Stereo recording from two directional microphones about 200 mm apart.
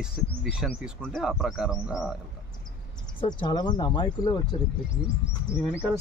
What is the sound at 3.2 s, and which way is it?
Speech, 25° left (ahead or behind).